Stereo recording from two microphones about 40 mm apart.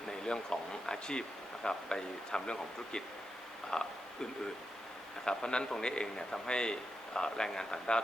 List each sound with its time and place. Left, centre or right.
0.1 s a man's voice: centre
5.2 s a man's voice: centre